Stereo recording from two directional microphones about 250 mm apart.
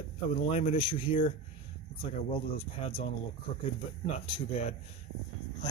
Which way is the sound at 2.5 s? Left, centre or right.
Left.